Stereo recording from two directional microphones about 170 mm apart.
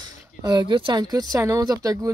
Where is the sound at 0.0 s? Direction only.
25° right (ahead or behind).